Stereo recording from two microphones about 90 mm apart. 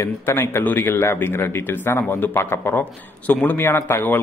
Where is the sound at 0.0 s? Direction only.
25° left (ahead or behind).